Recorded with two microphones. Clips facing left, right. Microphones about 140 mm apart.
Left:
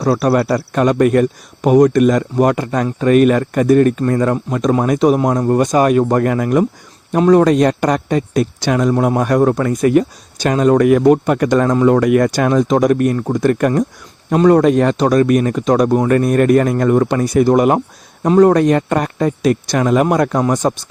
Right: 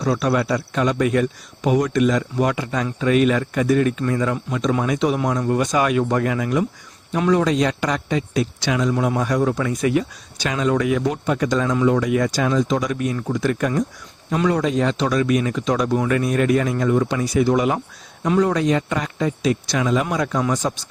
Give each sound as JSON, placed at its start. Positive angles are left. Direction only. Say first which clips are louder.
{"t": 0.0, "sound": "speech", "louder": "left 6 dB", "side_deg": 60}